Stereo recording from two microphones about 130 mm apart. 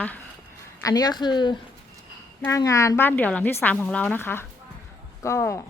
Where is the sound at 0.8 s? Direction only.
30° left (ahead or behind).